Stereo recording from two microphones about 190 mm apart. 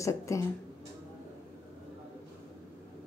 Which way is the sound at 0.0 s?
15° left (ahead or behind).